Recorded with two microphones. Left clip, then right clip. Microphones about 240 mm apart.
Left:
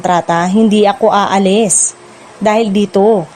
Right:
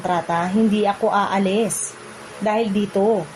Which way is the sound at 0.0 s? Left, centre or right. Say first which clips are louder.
Left 9 dB; left.